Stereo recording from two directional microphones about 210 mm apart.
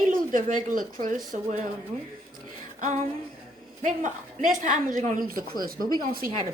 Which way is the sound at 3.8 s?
40° right (ahead or behind).